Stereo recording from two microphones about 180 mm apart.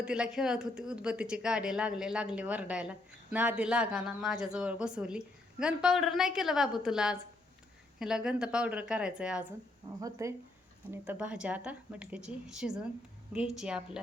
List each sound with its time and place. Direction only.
0.0 s a woman's voice: 5° right (ahead or behind)
10.0 s a woman's voice: 15° right (ahead or behind)